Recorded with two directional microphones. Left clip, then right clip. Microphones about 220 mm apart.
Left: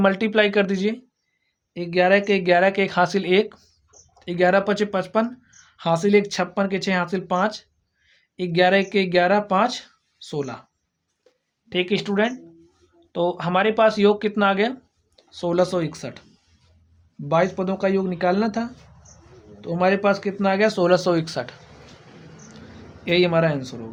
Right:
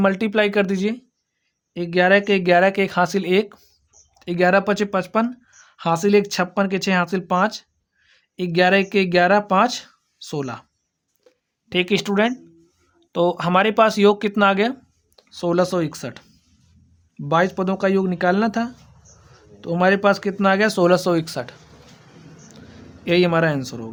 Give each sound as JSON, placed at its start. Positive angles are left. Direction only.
{"t": 0.0, "sound": "speech", "side_deg": -25}
{"t": 11.7, "sound": "speech", "side_deg": -40}
{"t": 17.2, "sound": "speech", "side_deg": -35}
{"t": 23.0, "sound": "speech", "side_deg": -35}